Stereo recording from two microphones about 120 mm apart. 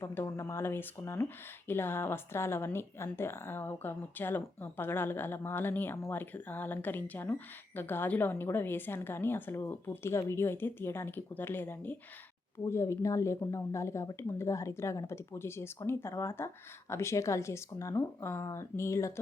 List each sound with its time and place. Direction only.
0.0 s speech: 20° left (ahead or behind)